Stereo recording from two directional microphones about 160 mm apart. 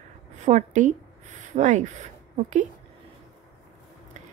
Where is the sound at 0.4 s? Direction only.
45° right (ahead or behind).